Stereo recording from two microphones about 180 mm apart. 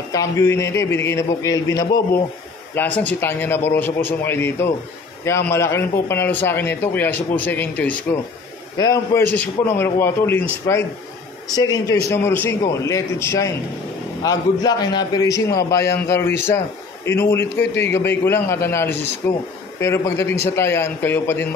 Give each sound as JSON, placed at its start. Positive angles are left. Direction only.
{"t": 0.1, "sound": "a man's voice", "side_deg": 15}
{"t": 8.7, "sound": "a man's voice", "side_deg": 20}